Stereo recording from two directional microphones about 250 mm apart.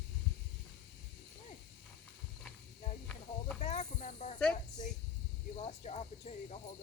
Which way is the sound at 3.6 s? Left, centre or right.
Left.